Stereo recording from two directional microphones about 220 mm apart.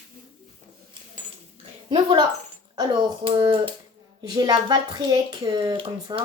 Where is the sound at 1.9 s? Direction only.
20° right (ahead or behind).